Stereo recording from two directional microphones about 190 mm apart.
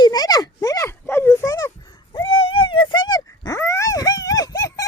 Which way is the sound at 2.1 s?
30° left (ahead or behind).